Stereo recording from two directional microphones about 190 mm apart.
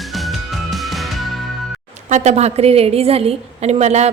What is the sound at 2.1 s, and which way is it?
A woman's voice, 40° right (ahead or behind).